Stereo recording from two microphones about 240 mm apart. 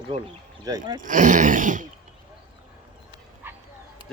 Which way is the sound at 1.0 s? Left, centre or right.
Right.